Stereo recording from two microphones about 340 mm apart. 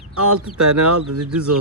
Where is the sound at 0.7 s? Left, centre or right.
Right.